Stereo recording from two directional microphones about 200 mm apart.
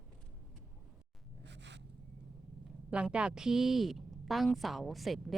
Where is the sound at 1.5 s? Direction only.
60° right (ahead or behind).